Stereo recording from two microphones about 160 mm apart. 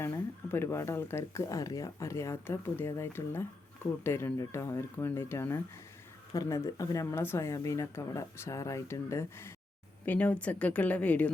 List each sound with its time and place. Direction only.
0.0 s speech: 15° left (ahead or behind)